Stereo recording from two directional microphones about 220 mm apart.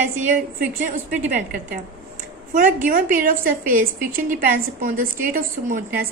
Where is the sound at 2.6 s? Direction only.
35° right (ahead or behind).